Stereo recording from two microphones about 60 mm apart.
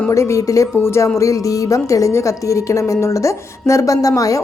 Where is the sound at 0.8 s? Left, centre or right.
Left.